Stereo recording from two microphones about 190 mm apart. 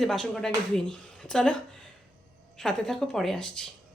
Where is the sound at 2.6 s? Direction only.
Centre (ahead or behind).